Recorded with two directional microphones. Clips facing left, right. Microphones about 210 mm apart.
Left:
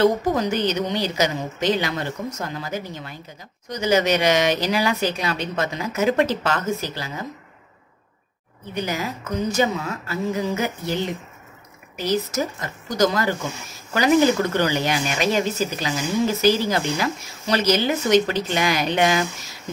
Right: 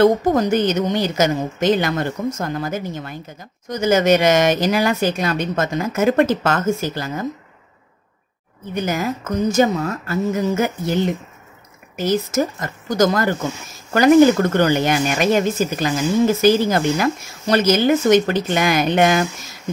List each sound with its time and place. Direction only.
0.0 s speech: 45° right (ahead or behind)
8.7 s speech: 50° right (ahead or behind)
12.0 s speech: 50° right (ahead or behind)